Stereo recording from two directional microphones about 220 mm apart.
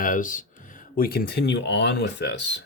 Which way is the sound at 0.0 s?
40° left (ahead or behind).